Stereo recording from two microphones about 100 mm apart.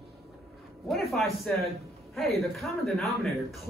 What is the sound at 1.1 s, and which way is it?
Speech, centre (ahead or behind).